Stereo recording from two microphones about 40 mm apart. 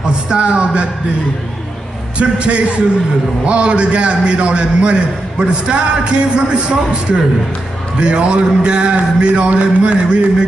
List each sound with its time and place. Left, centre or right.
0.0 s a man's voice: right
2.1 s a man's voice: right